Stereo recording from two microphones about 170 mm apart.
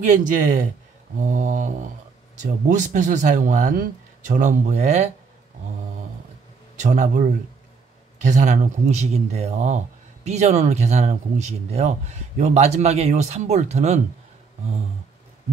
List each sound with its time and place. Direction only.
0.0 s speech: 50° right (ahead or behind)
6.8 s speech: 50° right (ahead or behind)
8.3 s speech: 45° right (ahead or behind)